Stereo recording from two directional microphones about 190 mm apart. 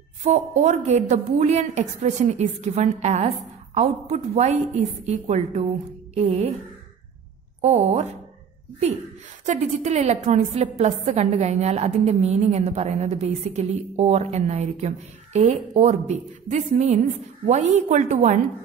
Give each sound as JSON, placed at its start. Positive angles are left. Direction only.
{"t": 0.2, "sound": "a woman's voice", "side_deg": -35}
{"t": 7.6, "sound": "a woman's voice", "side_deg": -35}
{"t": 9.5, "sound": "a woman's voice", "side_deg": -40}